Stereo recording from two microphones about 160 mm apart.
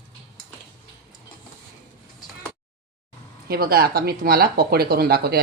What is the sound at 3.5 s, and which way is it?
Speech, 70° right (ahead or behind).